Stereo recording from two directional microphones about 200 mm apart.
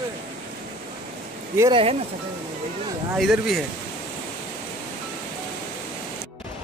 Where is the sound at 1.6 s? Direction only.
25° right (ahead or behind).